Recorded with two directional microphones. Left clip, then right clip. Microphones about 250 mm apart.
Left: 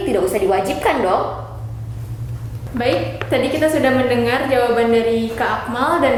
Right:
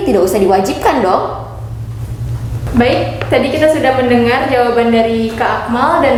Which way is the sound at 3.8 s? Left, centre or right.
Left.